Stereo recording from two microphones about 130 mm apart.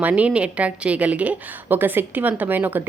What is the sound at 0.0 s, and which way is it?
Speech, 10° right (ahead or behind).